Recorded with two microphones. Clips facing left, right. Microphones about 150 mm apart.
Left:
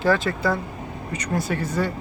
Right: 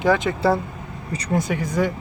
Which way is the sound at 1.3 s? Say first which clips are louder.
Right 3 dB; 15° right (ahead or behind).